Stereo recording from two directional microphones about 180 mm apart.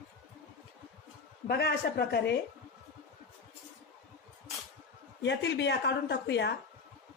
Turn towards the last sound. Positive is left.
turn(degrees=75)  # may be behind; listen again after turning